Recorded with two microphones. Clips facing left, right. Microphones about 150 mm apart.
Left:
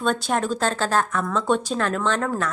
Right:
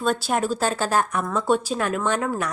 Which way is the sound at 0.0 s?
5° right (ahead or behind).